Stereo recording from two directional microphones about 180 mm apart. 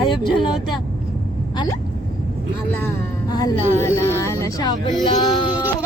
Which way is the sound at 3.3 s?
20° left (ahead or behind).